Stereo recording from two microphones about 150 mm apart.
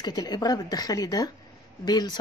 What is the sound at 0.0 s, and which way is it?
Speech, 25° left (ahead or behind).